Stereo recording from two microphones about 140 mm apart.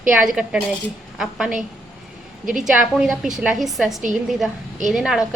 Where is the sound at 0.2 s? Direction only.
5° right (ahead or behind).